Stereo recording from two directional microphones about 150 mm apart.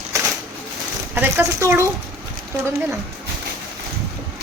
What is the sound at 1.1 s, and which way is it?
Speech, 15° right (ahead or behind).